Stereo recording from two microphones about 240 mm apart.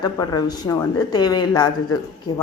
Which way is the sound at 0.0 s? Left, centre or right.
Centre.